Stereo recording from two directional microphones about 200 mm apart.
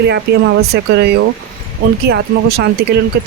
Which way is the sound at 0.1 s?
55° right (ahead or behind).